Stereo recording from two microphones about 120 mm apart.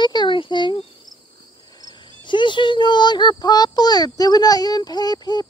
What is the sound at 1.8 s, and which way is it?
Speech, 40° left (ahead or behind).